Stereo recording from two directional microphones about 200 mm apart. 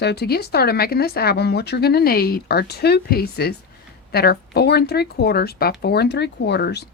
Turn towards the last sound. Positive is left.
turn(degrees=55)  # may be behind; listen again after turning